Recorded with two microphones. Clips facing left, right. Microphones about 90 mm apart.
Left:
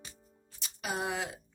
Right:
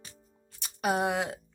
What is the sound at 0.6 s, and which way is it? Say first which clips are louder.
Speech: right 8 dB; 55° right (ahead or behind).